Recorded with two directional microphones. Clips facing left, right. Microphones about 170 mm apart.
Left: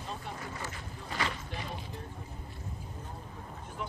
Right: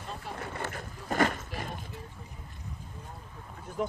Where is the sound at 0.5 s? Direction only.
60° right (ahead or behind).